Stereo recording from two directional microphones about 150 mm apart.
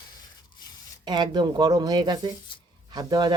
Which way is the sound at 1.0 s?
30° right (ahead or behind).